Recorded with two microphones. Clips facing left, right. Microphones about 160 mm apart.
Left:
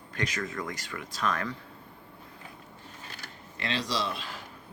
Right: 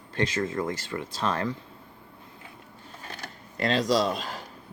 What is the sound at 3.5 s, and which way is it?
Speech, 45° right (ahead or behind).